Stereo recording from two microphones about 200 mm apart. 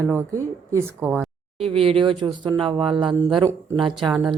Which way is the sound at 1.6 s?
30° right (ahead or behind).